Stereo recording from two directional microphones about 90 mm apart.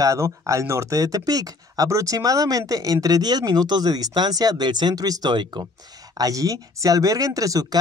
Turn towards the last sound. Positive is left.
turn(degrees=-40)  # may be behind; listen again after turning